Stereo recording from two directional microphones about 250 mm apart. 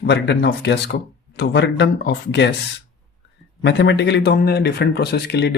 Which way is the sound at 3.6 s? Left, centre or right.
Left.